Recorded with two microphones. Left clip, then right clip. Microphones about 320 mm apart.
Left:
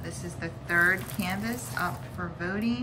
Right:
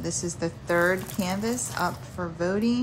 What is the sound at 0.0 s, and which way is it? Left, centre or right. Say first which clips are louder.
A woman's voice: right 7 dB; centre.